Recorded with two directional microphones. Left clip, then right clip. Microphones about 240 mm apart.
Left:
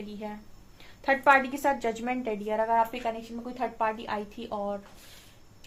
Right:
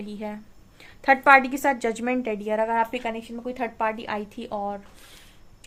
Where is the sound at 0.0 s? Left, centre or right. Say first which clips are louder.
Right 4 dB; right.